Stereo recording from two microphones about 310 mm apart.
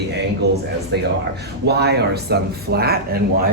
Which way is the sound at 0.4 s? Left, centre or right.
Right.